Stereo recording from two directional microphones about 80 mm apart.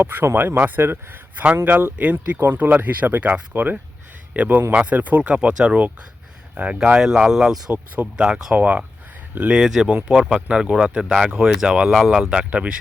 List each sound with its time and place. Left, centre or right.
0.0 s a man's voice: right
9.6 s speech: centre